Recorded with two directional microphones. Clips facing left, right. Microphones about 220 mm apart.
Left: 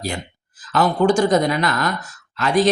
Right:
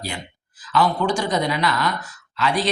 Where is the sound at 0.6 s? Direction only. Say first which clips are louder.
Left 3 dB; 45° left (ahead or behind).